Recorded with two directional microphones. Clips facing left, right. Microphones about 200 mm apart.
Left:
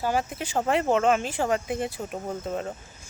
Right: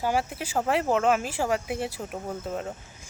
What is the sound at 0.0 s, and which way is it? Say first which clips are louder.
Speech: even; 10° right (ahead or behind).